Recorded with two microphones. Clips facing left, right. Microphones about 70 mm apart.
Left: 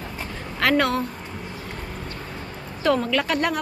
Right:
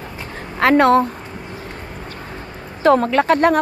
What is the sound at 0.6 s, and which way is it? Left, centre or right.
Speech, right.